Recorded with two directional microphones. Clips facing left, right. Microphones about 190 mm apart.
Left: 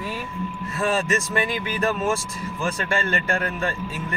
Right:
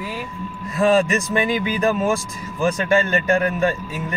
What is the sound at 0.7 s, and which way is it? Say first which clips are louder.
A man's voice: right 7 dB; 15° right (ahead or behind).